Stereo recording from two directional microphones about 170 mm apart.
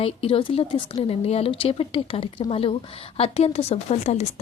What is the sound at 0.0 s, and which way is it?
Speech, 35° left (ahead or behind).